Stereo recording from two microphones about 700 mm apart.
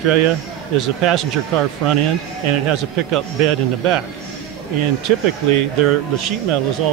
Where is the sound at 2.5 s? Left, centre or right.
Right.